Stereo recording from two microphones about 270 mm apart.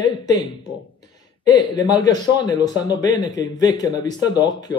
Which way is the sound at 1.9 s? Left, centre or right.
Centre.